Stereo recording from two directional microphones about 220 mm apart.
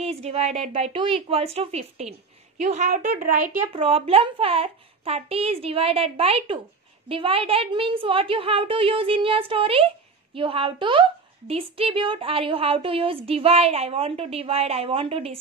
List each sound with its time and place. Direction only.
0.0 s a woman's voice: 30° right (ahead or behind)
3.7 s a woman's voice: 25° right (ahead or behind)